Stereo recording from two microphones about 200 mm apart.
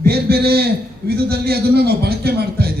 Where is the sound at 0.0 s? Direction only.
50° right (ahead or behind).